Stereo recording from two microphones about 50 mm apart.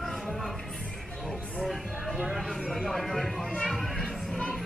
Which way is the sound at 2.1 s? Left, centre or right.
Centre.